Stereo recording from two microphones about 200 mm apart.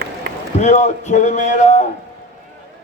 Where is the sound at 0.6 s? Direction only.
35° left (ahead or behind).